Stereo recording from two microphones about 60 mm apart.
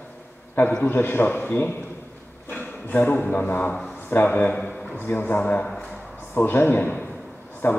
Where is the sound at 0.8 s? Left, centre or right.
Left.